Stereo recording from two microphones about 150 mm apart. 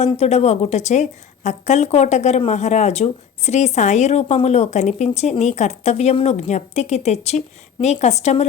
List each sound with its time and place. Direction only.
0.0 s speech: 45° left (ahead or behind)